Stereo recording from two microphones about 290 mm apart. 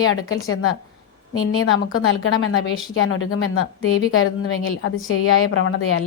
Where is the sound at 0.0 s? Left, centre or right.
Left.